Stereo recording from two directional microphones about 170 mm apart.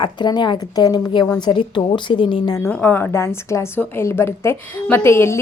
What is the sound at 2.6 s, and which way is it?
A woman's voice, 10° left (ahead or behind).